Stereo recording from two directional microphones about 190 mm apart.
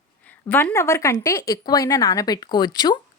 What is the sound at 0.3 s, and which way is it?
A woman's voice, 10° left (ahead or behind).